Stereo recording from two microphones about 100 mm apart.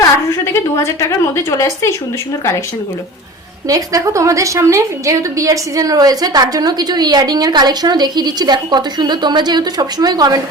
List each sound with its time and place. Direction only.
0.8 s speech: 30° left (ahead or behind)
3.7 s a woman's voice: 35° right (ahead or behind)